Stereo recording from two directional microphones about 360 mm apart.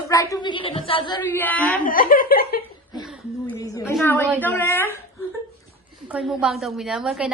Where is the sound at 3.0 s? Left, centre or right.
Centre.